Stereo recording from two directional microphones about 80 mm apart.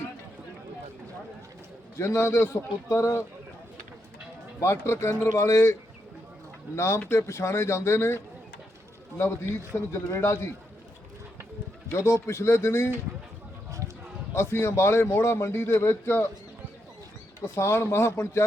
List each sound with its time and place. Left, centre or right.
2.0 s a man's voice: left
4.6 s a man's voice: left
6.7 s a man's voice: left
11.9 s a man's voice: left
13.7 s a sound: right
14.3 s a man's voice: left
17.4 s a man's voice: left